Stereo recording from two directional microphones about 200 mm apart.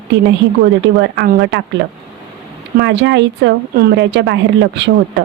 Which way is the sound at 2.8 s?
60° right (ahead or behind).